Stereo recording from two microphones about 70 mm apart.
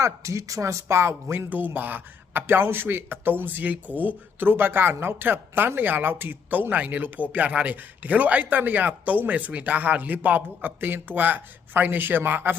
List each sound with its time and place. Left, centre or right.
0.0 s speech: right